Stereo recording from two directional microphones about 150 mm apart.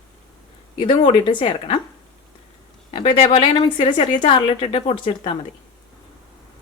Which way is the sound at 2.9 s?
40° left (ahead or behind).